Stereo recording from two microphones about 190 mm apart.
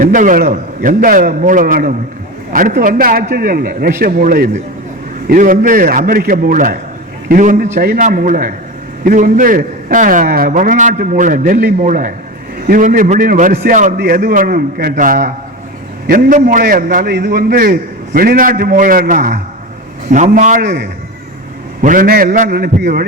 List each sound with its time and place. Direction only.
0.0 s a man's voice: 45° right (ahead or behind)
20.6 s a man's voice: 55° right (ahead or behind)
21.8 s a man's voice: 45° right (ahead or behind)